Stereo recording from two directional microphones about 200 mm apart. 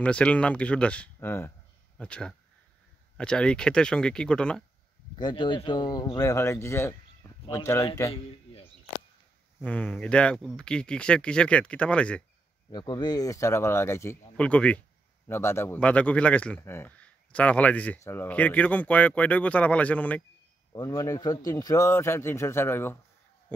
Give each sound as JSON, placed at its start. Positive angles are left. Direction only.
{"t": 0.0, "sound": "speech", "side_deg": 5}
{"t": 5.1, "sound": "a man's voice", "side_deg": 25}
{"t": 8.1, "sound": "a sound", "side_deg": 30}
{"t": 9.6, "sound": "speech", "side_deg": 5}
{"t": 12.7, "sound": "a man's voice", "side_deg": 20}